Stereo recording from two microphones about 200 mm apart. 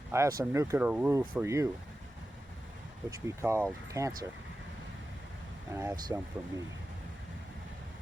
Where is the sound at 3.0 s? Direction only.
15° right (ahead or behind).